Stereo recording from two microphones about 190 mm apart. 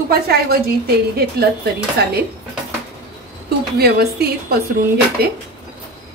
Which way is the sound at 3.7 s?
55° right (ahead or behind).